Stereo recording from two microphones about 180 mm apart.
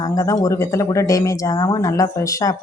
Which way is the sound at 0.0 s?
20° left (ahead or behind).